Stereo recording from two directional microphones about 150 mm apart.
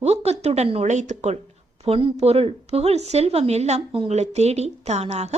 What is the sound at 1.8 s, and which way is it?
A woman's voice, 40° right (ahead or behind).